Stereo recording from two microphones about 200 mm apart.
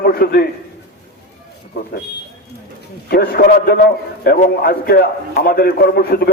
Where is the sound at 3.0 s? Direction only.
50° left (ahead or behind).